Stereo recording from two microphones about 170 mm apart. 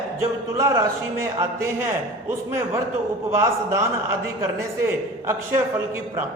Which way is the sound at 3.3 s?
15° right (ahead or behind).